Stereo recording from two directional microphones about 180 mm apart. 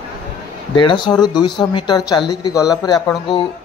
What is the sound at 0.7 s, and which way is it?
Speech, 25° left (ahead or behind).